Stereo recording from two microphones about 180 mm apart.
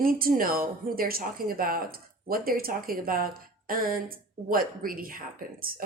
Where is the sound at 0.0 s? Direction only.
55° right (ahead or behind).